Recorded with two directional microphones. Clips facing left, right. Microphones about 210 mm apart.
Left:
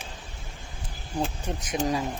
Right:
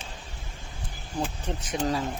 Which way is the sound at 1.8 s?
10° left (ahead or behind).